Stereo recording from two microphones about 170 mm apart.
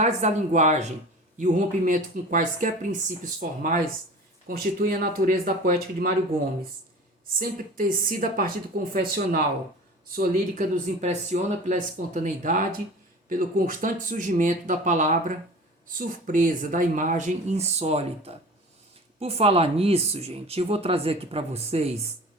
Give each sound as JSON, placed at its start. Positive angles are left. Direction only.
{"t": 0.0, "sound": "speech", "side_deg": -45}
{"t": 7.3, "sound": "speech", "side_deg": -55}